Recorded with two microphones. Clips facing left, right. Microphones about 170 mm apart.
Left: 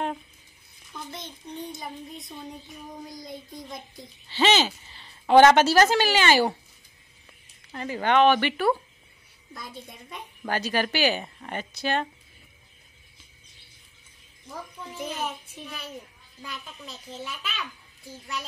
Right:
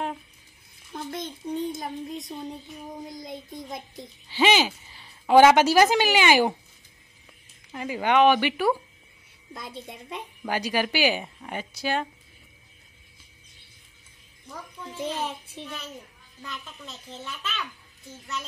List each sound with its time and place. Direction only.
0.9 s speech: 50° right (ahead or behind)
3.1 s a child's voice: 25° right (ahead or behind)
4.3 s a woman's voice: 10° right (ahead or behind)
7.7 s a woman's voice: 10° right (ahead or behind)
9.5 s a child's voice: 25° right (ahead or behind)
10.4 s a woman's voice: 10° right (ahead or behind)
15.0 s a child's voice: 30° right (ahead or behind)
16.4 s a child's voice: 5° left (ahead or behind)